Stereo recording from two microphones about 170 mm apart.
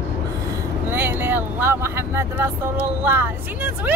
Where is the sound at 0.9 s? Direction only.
10° right (ahead or behind).